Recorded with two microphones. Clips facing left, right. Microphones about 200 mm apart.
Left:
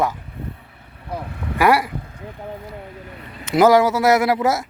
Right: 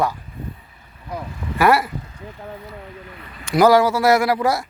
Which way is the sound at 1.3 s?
60° left (ahead or behind).